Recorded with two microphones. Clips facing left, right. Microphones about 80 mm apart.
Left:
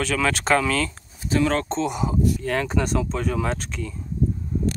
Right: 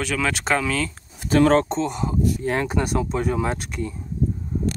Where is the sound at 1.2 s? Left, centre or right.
Right.